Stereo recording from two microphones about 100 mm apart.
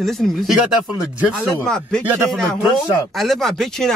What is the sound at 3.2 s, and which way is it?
Speech, 5° left (ahead or behind).